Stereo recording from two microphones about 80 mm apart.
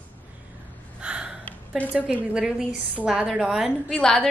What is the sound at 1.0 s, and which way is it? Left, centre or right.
Gasp, centre.